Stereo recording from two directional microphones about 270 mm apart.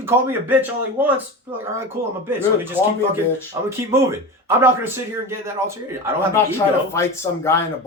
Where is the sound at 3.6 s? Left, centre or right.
Centre.